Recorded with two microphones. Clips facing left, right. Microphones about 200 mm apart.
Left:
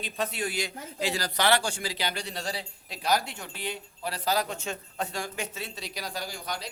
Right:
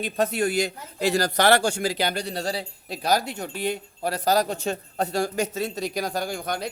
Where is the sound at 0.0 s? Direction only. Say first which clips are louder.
Right 8 dB; 45° right (ahead or behind).